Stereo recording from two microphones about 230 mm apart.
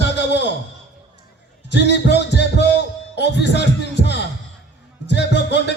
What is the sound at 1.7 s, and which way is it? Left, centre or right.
Music, left.